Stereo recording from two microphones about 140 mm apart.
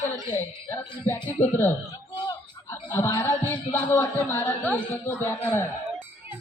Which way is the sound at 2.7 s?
20° left (ahead or behind).